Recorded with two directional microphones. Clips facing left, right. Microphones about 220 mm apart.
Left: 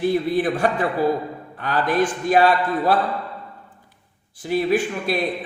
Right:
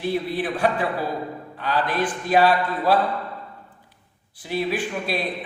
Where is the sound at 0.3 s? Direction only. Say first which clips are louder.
Left 3 dB; 45° left (ahead or behind).